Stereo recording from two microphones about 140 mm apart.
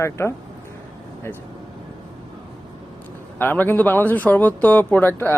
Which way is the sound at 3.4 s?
15° left (ahead or behind).